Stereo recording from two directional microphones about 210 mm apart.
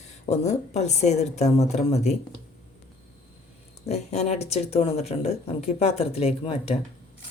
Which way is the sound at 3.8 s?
30° left (ahead or behind).